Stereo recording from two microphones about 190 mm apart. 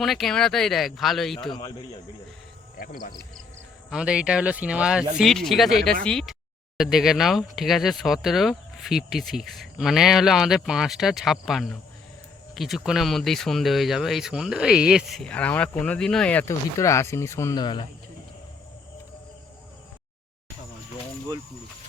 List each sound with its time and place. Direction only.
0.0 s speech: centre (ahead or behind)
2.7 s speech: 50° left (ahead or behind)
3.8 s speech: 5° right (ahead or behind); by 17.8 s 25° left (ahead or behind)